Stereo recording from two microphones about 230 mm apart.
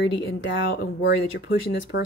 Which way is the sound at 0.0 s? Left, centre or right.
Left.